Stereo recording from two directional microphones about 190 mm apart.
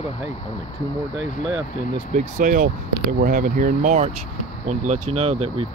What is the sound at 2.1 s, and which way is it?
Speech, 45° right (ahead or behind).